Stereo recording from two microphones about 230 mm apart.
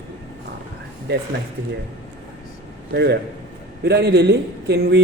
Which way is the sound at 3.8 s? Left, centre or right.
Right.